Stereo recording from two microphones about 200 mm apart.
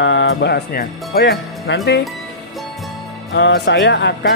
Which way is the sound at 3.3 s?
60° left (ahead or behind).